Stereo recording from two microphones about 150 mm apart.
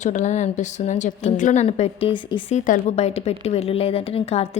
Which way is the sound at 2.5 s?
55° left (ahead or behind).